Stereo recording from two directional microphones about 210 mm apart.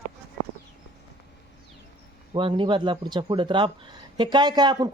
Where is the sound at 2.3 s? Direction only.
25° right (ahead or behind).